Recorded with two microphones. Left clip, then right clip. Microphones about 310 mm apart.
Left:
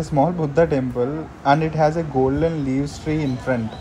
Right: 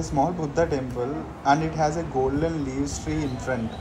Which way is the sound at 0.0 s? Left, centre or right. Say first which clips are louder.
Left 5 dB; left.